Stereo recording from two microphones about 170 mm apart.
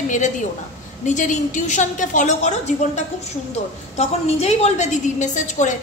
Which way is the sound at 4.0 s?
40° left (ahead or behind).